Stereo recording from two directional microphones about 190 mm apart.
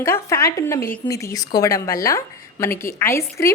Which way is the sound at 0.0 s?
15° left (ahead or behind).